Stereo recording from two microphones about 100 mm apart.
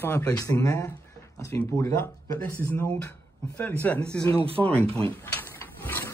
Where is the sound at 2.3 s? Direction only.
20° left (ahead or behind).